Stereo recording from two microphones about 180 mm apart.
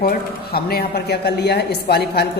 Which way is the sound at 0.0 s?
60° left (ahead or behind).